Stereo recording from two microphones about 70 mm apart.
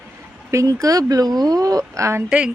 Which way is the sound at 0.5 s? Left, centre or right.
Right.